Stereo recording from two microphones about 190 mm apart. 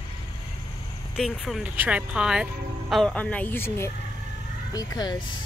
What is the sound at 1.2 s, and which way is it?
Speech, centre (ahead or behind).